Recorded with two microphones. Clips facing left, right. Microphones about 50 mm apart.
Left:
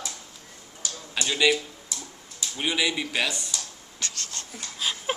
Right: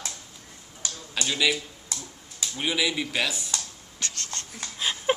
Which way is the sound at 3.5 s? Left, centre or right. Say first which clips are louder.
Right 1 dB; right.